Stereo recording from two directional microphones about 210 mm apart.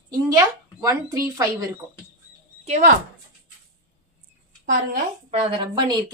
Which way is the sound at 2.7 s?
35° right (ahead or behind).